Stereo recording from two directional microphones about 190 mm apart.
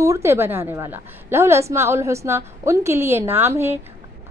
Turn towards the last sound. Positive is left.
turn(degrees=-15)  # may be behind; listen again after turning